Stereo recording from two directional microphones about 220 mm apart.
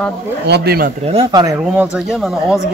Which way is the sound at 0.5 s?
45° right (ahead or behind).